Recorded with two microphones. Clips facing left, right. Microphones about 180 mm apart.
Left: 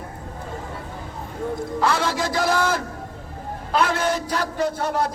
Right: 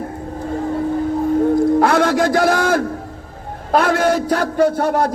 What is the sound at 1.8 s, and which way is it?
A man's voice, 55° right (ahead or behind).